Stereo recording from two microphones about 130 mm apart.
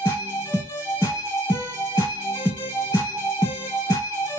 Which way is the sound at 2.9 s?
20° left (ahead or behind).